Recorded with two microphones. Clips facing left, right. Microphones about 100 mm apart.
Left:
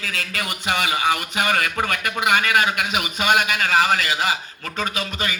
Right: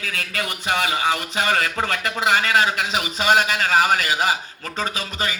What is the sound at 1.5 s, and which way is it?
A man's voice, 10° left (ahead or behind).